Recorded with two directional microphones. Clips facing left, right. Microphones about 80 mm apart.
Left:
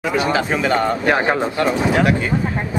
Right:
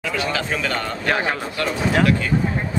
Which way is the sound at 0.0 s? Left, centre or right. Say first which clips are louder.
Left 6 dB; left.